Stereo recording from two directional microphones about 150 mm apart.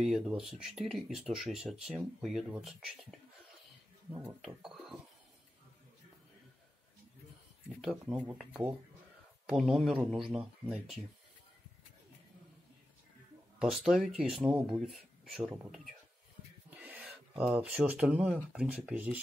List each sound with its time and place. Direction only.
0.0 s speech: 5° right (ahead or behind)
4.2 s speech: 5° right (ahead or behind)
7.9 s speech: 10° right (ahead or behind)
9.5 s speech: centre (ahead or behind)
13.8 s speech: 5° right (ahead or behind)
16.7 s gasp: 10° right (ahead or behind)
17.1 s speech: 5° right (ahead or behind)